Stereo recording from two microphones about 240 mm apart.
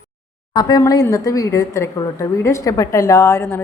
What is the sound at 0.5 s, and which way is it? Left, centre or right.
Speech, centre.